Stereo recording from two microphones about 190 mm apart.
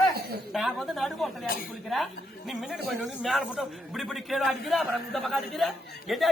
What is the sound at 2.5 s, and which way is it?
A man's voice, centre (ahead or behind).